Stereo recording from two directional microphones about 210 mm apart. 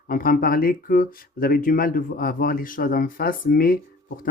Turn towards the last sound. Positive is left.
turn(degrees=45)  # may be behind; listen again after turning